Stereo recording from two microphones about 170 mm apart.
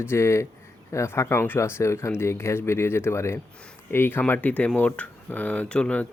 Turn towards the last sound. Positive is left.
turn(degrees=5)  # may be behind; listen again after turning